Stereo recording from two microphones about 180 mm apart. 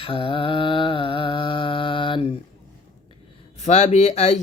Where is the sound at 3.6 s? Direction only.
40° left (ahead or behind).